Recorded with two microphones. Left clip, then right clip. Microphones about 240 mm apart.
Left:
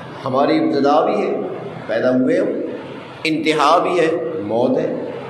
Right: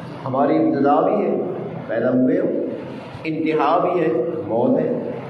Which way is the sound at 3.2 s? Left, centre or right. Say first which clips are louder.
Left 4 dB; left.